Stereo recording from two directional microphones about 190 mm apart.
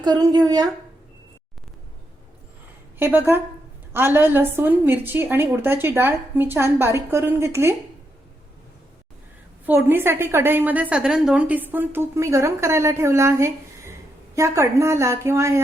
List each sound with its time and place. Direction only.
0.0 s speech: 20° right (ahead or behind)
3.0 s a woman's voice: 10° right (ahead or behind)
9.6 s a woman's voice: 10° right (ahead or behind)